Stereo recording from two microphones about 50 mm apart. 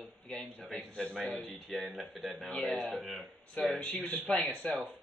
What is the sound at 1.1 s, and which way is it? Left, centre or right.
Speech, centre.